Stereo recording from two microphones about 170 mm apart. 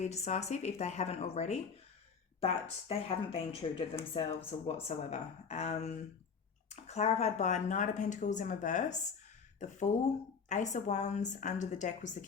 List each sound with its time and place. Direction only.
0.0 s speech: 40° left (ahead or behind)